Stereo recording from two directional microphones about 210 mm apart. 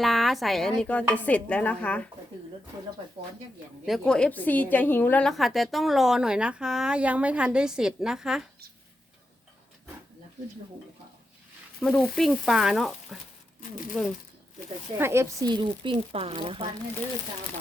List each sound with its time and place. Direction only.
0.0 s a woman's voice: centre (ahead or behind)
3.8 s a woman's voice: centre (ahead or behind)
11.8 s a woman's voice: centre (ahead or behind)
14.9 s speech: 10° right (ahead or behind)